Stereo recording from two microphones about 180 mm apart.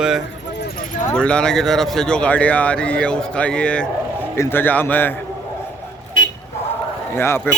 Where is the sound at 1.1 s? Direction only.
5° left (ahead or behind).